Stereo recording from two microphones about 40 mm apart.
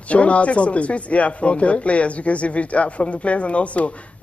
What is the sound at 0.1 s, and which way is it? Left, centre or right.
Speech, left.